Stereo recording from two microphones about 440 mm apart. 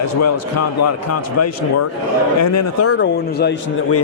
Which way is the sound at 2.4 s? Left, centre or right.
Left.